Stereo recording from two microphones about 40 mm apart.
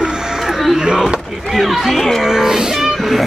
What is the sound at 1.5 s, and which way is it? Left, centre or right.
Speech, centre.